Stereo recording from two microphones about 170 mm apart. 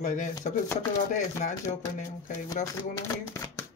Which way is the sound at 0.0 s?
45° left (ahead or behind).